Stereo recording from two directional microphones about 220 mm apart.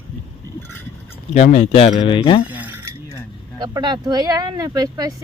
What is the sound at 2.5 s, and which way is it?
Mechanisms, 5° right (ahead or behind).